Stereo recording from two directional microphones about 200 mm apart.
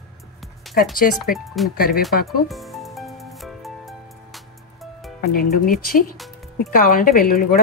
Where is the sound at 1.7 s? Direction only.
50° left (ahead or behind).